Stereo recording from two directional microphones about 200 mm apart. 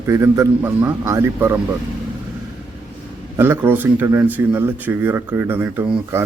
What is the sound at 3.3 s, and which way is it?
Speech, 10° right (ahead or behind).